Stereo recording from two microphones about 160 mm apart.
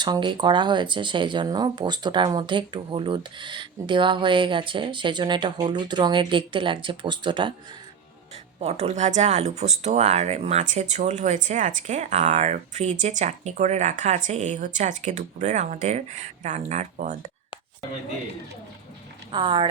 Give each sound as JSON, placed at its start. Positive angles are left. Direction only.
{"t": 0.0, "sound": "speech", "side_deg": -30}
{"t": 8.5, "sound": "speech", "side_deg": -40}
{"t": 19.3, "sound": "speech", "side_deg": -30}